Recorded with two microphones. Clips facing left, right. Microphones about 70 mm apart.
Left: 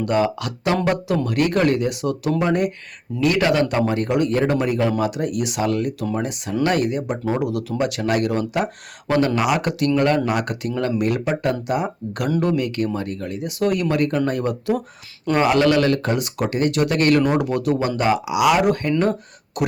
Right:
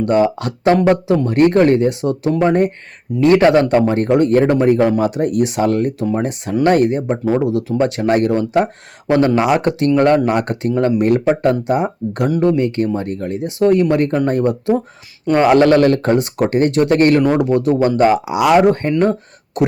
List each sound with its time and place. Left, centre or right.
0.0 s speech: right
0.9 s speech: right